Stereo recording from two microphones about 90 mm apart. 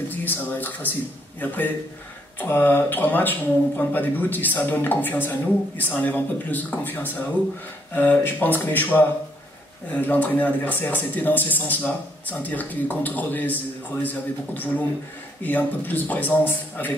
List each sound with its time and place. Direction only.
0.1 s speech: 20° left (ahead or behind)